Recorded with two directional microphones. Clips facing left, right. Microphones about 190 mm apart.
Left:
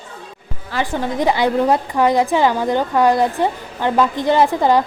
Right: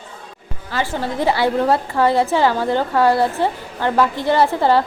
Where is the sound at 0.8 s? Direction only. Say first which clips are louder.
Left 2 dB; 15° left (ahead or behind).